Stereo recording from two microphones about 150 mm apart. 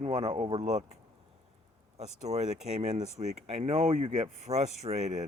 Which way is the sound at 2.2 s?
50° right (ahead or behind).